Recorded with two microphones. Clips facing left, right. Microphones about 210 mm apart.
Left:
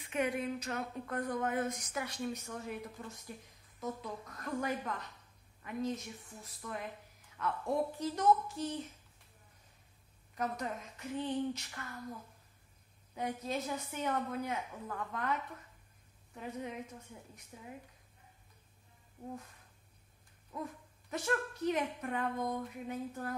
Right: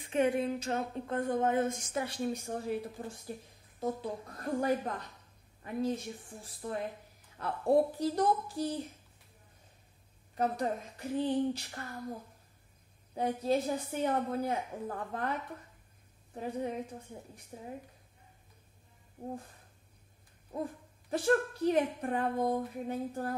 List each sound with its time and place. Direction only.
0.0 s a woman's voice: 30° right (ahead or behind)
10.3 s a woman's voice: 30° right (ahead or behind)
16.3 s a woman's voice: 35° right (ahead or behind)
19.2 s a woman's voice: 35° right (ahead or behind)
20.5 s a woman's voice: 30° right (ahead or behind)